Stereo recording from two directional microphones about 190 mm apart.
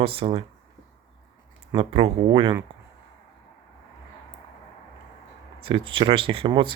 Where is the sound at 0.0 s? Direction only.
30° right (ahead or behind).